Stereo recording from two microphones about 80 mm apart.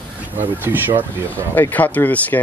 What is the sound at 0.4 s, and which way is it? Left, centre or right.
Speech, right.